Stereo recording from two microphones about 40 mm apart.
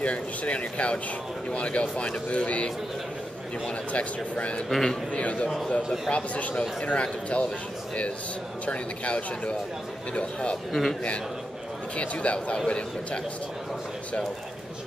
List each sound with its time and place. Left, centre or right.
0.0 s speech: left
3.9 s speech: left
4.6 s a man's voice: centre
5.1 s speech: left
8.6 s a man's voice: left
10.7 s a man's voice: centre
12.0 s speech: left